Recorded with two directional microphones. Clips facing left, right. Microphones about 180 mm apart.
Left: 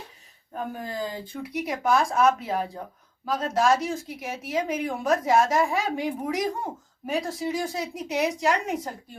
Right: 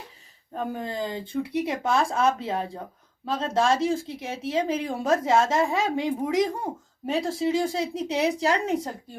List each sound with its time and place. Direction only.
0.5 s speech: 25° right (ahead or behind)